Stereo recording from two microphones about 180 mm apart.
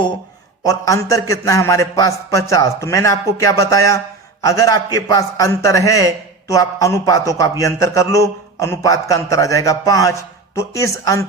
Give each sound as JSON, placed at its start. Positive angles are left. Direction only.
{"t": 0.6, "sound": "a man's voice", "side_deg": 20}